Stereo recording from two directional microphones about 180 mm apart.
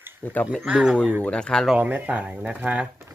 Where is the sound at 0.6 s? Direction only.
5° right (ahead or behind).